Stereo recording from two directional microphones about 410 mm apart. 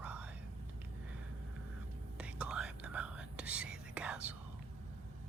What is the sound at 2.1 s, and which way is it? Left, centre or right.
Whispering, centre.